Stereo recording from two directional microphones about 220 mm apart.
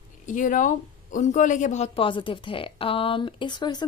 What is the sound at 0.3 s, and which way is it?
A woman's voice, 35° left (ahead or behind).